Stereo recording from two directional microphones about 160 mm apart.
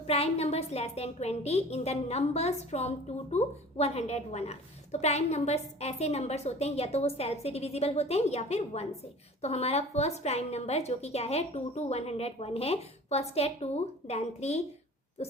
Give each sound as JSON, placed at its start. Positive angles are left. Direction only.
{"t": 0.1, "sound": "a woman's voice", "side_deg": 40}